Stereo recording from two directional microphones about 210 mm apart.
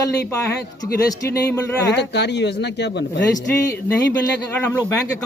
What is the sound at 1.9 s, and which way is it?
Speech, 55° left (ahead or behind).